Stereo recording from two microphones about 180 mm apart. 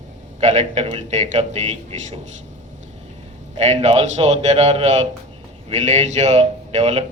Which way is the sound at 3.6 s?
40° right (ahead or behind).